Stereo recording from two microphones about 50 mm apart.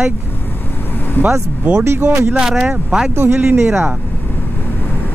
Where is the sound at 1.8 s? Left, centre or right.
Right.